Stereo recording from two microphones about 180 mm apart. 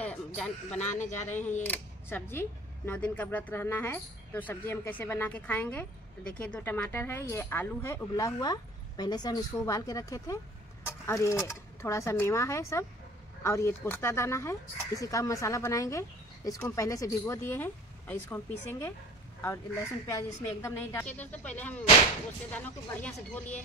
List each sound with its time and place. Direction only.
0.0 s a sound: 5° left (ahead or behind)
0.7 s speech: 40° left (ahead or behind)
1.6 s speech: 10° left (ahead or behind)